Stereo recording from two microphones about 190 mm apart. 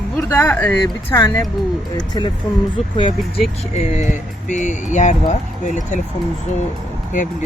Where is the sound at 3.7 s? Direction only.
40° left (ahead or behind).